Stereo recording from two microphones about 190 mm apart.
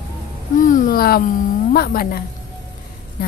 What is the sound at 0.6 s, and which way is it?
Speech, 45° left (ahead or behind).